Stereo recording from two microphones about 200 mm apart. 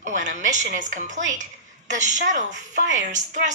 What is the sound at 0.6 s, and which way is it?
A woman's voice, 40° right (ahead or behind).